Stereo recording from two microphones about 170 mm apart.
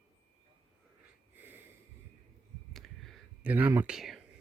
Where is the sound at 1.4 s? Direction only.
10° right (ahead or behind).